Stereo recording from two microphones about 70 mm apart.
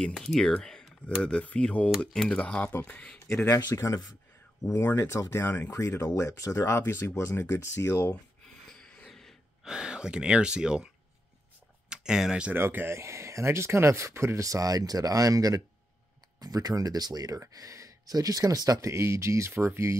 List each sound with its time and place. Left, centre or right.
0.0 s speech: centre
0.6 s computer keyboard: centre
1.2 s speech: centre
2.7 s speech: left
3.4 s speech: left
4.6 s speech: left
8.7 s a sound: centre
9.7 s speech: centre
11.9 s speech: centre
12.5 s speech: right
16.3 s speech: right
17.5 s speech: right
18.9 s speech: right